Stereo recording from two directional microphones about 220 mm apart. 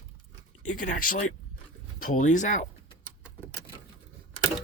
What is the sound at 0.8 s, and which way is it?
Speech, 35° left (ahead or behind).